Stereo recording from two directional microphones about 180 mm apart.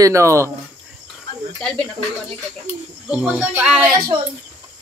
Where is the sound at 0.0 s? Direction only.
15° right (ahead or behind).